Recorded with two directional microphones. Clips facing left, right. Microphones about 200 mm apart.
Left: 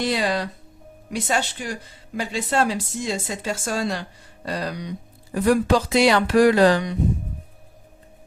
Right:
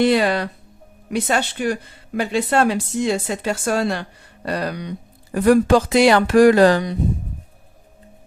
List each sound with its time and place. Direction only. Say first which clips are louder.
0.0 s speech: right 6 dB; 60° right (ahead or behind)